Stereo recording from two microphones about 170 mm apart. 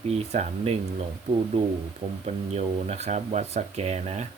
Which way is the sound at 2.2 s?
40° right (ahead or behind).